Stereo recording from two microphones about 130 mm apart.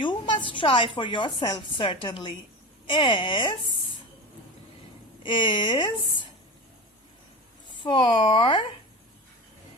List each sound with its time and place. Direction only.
0.0 s a sound: 40° left (ahead or behind)
0.5 s a woman's voice: 40° left (ahead or behind)
5.2 s a woman's voice: 40° left (ahead or behind)
7.8 s a woman's voice: 40° left (ahead or behind)